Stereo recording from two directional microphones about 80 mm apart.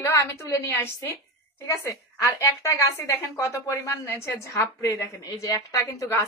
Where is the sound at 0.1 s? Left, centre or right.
Left.